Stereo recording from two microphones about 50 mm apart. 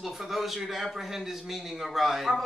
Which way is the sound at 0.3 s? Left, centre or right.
Centre.